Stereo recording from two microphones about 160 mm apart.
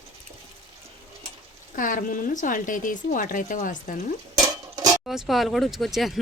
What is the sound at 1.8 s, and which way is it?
Speech, 60° left (ahead or behind).